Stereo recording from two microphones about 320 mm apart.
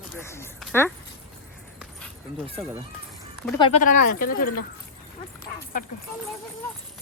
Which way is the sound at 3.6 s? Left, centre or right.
Left.